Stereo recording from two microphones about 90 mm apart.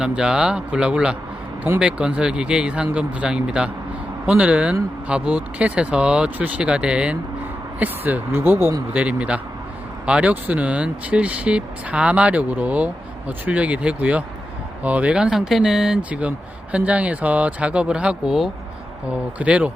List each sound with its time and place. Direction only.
0.0 s speech: 10° right (ahead or behind); by 8.7 s 25° right (ahead or behind)
8.9 s speech: 15° right (ahead or behind)